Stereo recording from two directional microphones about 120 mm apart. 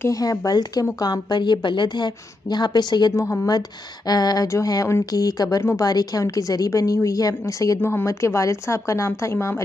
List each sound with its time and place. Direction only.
0.0 s speech: 30° left (ahead or behind)